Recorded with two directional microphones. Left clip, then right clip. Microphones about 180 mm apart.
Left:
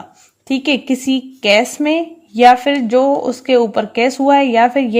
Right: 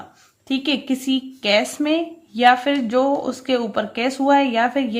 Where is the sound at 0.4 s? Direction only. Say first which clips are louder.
Left 6 dB; 35° left (ahead or behind).